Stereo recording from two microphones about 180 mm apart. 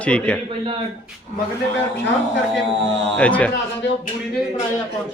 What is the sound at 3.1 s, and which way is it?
Speech, 5° left (ahead or behind).